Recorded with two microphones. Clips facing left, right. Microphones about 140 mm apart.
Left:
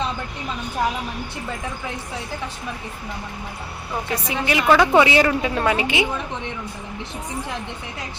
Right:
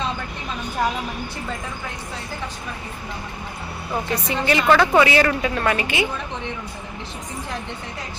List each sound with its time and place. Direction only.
4.1 s a woman's voice: 10° left (ahead or behind)
4.9 s a woman's voice: 20° left (ahead or behind)